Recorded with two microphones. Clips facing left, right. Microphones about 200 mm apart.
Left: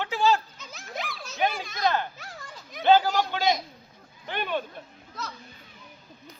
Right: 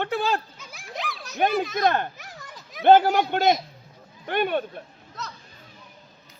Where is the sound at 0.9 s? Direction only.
Centre (ahead or behind).